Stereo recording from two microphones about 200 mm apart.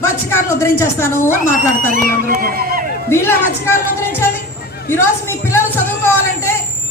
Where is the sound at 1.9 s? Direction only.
45° right (ahead or behind).